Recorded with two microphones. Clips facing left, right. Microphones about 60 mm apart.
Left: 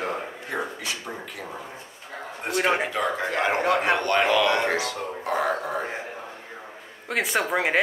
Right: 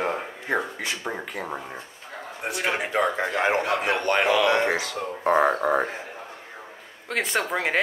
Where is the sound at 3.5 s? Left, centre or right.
Left.